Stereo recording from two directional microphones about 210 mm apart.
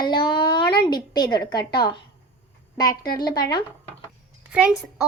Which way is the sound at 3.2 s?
20° left (ahead or behind).